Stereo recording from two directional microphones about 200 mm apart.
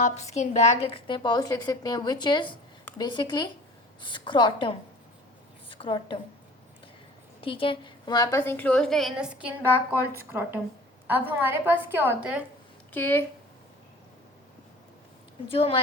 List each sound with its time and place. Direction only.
0.0 s a woman's voice: 35° left (ahead or behind)
7.4 s a woman's voice: 25° left (ahead or behind); by 12.4 s 10° right (ahead or behind)
12.9 s a woman's voice: 10° left (ahead or behind)
15.4 s a woman's voice: 30° left (ahead or behind)